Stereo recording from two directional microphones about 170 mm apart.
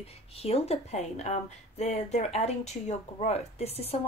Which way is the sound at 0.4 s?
35° left (ahead or behind).